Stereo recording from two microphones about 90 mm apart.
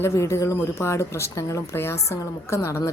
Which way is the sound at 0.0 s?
35° left (ahead or behind).